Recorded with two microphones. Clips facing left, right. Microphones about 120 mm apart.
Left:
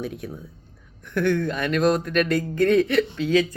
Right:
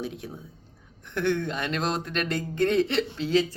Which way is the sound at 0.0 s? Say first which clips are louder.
Left 3 dB; 25° right (ahead or behind).